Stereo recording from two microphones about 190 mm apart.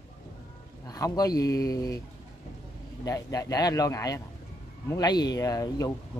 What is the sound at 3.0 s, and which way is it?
Speech, 20° left (ahead or behind).